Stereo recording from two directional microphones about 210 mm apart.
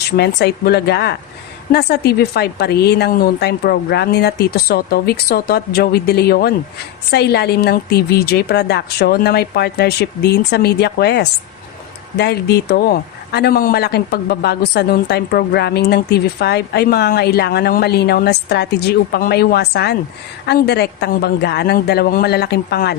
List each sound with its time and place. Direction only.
0.2 s a man's voice: 50° left (ahead or behind)